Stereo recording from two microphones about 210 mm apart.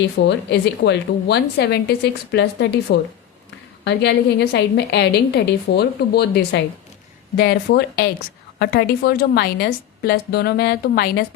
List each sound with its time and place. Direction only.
0.2 s a woman's voice: 55° left (ahead or behind)